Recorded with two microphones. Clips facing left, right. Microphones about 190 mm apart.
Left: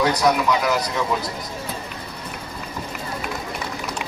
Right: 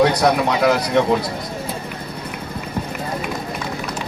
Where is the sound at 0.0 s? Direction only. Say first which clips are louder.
Right 3 dB; 60° right (ahead or behind).